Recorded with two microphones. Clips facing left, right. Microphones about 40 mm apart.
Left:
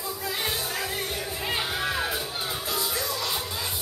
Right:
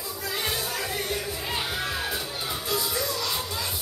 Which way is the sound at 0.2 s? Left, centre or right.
Centre.